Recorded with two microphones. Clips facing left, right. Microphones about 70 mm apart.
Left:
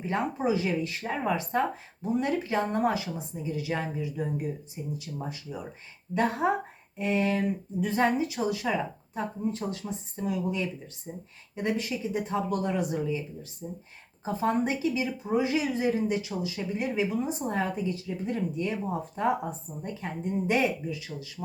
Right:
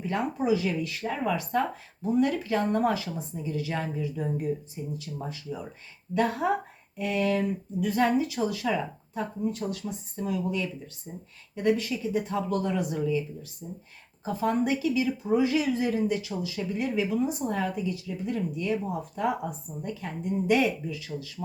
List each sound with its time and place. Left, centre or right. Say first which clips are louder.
0.0 s speech: even; left